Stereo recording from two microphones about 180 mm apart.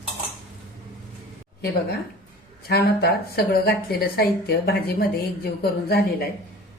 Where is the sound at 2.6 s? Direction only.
60° left (ahead or behind).